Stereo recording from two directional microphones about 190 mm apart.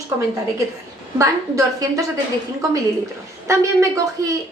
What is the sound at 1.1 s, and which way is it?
Speech, 15° right (ahead or behind).